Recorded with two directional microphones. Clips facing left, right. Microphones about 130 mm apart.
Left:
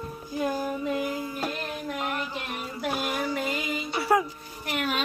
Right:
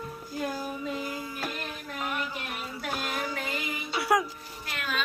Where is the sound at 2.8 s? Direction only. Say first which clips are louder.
Left 4 dB; 15° left (ahead or behind).